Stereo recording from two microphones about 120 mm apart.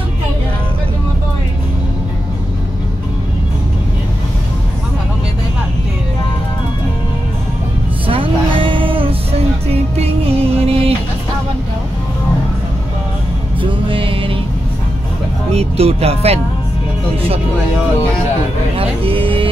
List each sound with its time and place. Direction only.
8.1 s music: 45° right (ahead or behind)
13.6 s music: 45° right (ahead or behind)
15.5 s speech: 60° right (ahead or behind)
18.8 s music: 50° right (ahead or behind)